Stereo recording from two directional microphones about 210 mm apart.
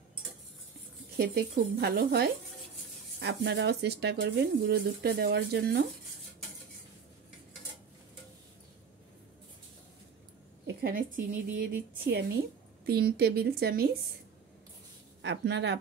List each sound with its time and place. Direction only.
1.1 s speech: 50° right (ahead or behind)
10.7 s speech: 45° right (ahead or behind)
15.2 s speech: 55° right (ahead or behind)